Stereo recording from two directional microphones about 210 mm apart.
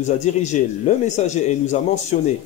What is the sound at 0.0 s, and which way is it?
A man's voice, 35° left (ahead or behind).